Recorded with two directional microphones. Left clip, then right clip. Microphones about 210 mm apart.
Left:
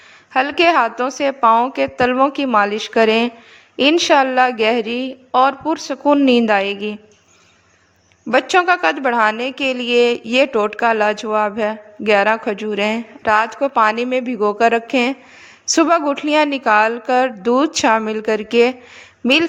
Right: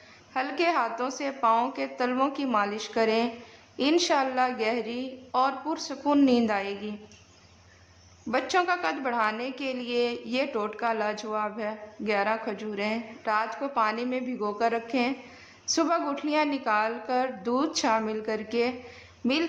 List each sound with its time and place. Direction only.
0.3 s a woman's voice: 35° left (ahead or behind)
8.3 s a woman's voice: 35° left (ahead or behind)